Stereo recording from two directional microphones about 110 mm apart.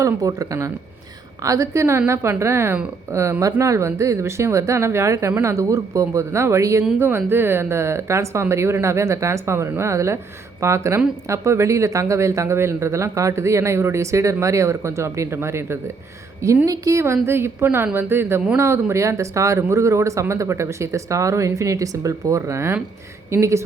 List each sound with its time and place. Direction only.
0.0 s speech: 30° right (ahead or behind)